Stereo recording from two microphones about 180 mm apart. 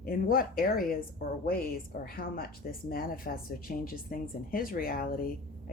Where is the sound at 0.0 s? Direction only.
55° left (ahead or behind).